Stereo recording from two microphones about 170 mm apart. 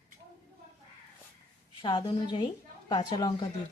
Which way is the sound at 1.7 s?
30° left (ahead or behind).